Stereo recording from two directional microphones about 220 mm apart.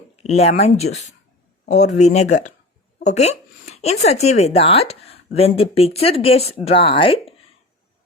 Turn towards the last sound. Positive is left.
turn(degrees=25)  # may be behind; listen again after turning